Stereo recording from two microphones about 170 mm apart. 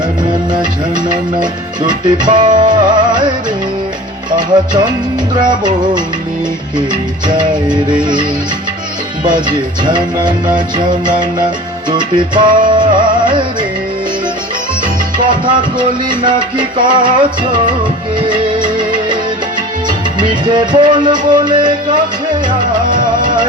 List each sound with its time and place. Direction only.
0.5 s music: 25° right (ahead or behind)
4.3 s speech: 25° right (ahead or behind)
5.4 s music: 25° right (ahead or behind)
7.3 s music: 25° right (ahead or behind)
15.2 s music: 30° right (ahead or behind)
18.3 s music of bollywood: 25° right (ahead or behind)
19.9 s music: 25° right (ahead or behind)
22.9 s music: 50° right (ahead or behind)